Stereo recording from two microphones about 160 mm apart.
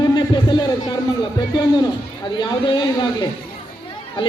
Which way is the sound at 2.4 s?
25° left (ahead or behind).